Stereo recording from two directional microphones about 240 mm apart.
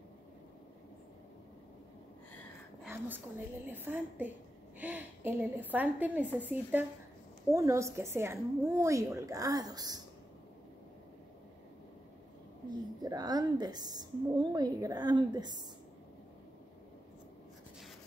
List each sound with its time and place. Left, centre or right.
2.8 s a woman's voice: centre
12.6 s a woman's voice: centre